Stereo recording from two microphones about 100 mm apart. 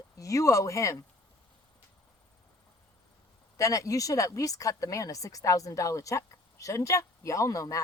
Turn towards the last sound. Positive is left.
turn(degrees=35)  # may be behind; listen again after turning